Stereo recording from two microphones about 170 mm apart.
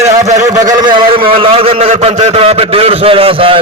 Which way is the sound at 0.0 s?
20° right (ahead or behind).